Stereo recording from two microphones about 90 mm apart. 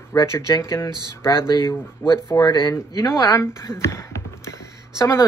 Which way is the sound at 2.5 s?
50° left (ahead or behind).